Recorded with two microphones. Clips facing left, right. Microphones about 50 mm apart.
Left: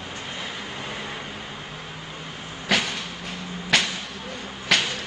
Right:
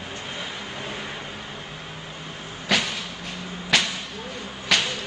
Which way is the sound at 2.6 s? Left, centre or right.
Centre.